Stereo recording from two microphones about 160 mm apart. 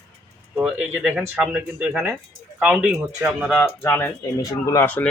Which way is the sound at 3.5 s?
15° left (ahead or behind).